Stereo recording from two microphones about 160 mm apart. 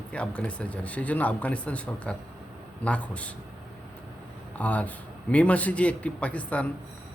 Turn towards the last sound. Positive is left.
turn(degrees=10)  # may be behind; listen again after turning